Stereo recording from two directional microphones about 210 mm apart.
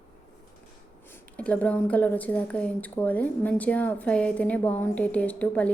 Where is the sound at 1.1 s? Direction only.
5° left (ahead or behind).